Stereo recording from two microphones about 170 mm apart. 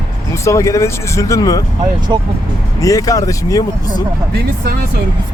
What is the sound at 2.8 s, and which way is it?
Speech, 20° left (ahead or behind).